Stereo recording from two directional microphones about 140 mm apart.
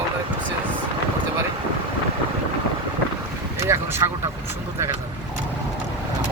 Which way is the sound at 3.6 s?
20° right (ahead or behind).